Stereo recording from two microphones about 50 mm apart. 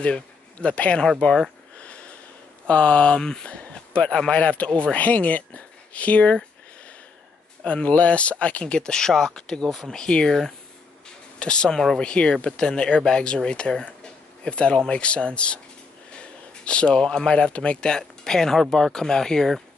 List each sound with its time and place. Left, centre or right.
0.0 s speech: left
1.8 s sniff: left
2.7 s speech: left
7.6 s speech: left; by 19.5 s centre